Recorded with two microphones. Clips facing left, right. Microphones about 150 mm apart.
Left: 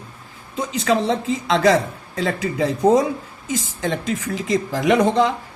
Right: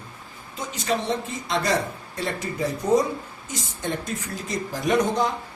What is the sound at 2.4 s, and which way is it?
A man's voice, 90° left.